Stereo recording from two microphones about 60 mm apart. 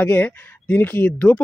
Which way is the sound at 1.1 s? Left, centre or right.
Left.